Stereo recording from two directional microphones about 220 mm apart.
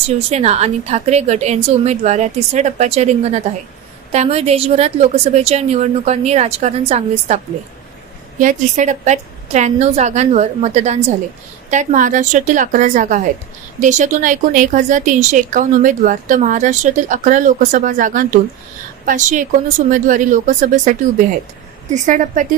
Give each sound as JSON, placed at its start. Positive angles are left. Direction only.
{"t": 0.0, "sound": "a woman's voice", "side_deg": -30}
{"t": 8.4, "sound": "a woman's voice", "side_deg": -35}
{"t": 21.9, "sound": "a woman's voice", "side_deg": -35}